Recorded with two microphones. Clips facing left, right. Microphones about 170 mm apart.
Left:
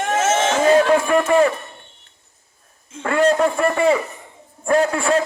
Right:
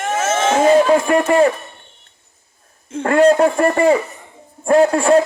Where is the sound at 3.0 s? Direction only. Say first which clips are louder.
Right 4 dB; 40° right (ahead or behind).